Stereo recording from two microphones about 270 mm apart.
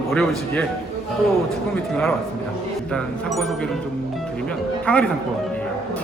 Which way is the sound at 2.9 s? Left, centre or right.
Centre.